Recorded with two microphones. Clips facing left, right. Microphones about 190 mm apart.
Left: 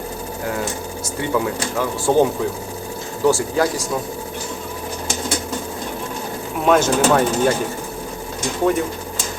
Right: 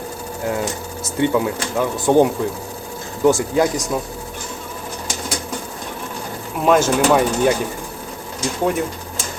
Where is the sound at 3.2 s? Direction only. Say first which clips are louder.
Right 2 dB; 20° right (ahead or behind).